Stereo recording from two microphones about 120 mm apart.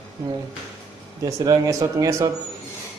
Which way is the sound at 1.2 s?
30° right (ahead or behind).